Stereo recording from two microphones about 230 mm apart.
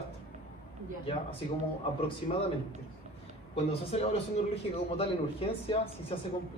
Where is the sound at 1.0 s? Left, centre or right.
Left.